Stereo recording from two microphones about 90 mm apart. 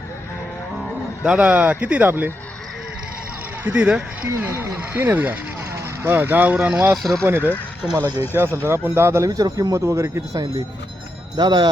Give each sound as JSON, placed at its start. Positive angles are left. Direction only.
{"t": 1.2, "sound": "speech", "side_deg": -15}
{"t": 3.6, "sound": "speech", "side_deg": -20}
{"t": 4.4, "sound": "speech", "side_deg": -30}
{"t": 6.9, "sound": "speech", "side_deg": 0}
{"t": 7.3, "sound": "speech", "side_deg": -25}
{"t": 7.9, "sound": "a man's voice", "side_deg": -40}
{"t": 8.6, "sound": "a man's voice", "side_deg": -25}
{"t": 11.3, "sound": "speech", "side_deg": -55}